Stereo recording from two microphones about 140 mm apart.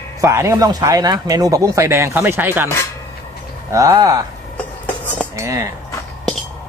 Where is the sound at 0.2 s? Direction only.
20° right (ahead or behind).